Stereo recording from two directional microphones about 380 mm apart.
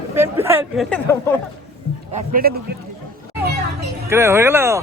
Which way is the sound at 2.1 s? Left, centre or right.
Right.